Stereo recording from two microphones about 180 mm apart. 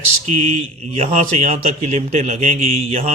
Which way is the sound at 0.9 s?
35° right (ahead or behind).